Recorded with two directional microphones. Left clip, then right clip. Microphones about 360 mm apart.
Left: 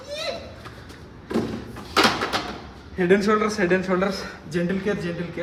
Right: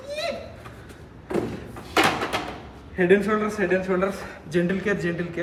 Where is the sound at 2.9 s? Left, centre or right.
Centre.